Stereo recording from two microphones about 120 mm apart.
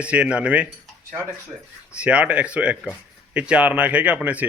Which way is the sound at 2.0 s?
10° right (ahead or behind).